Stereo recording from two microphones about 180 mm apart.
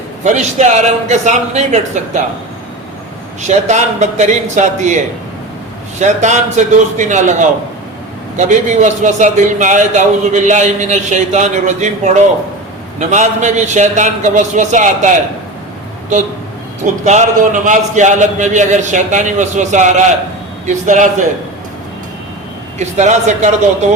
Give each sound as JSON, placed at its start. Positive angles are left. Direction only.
{"t": 0.3, "sound": "a man's voice", "side_deg": -40}
{"t": 3.4, "sound": "a man's voice", "side_deg": -40}
{"t": 6.0, "sound": "a man's voice", "side_deg": -40}
{"t": 17.1, "sound": "a man's voice", "side_deg": -40}
{"t": 22.8, "sound": "a man's voice", "side_deg": -40}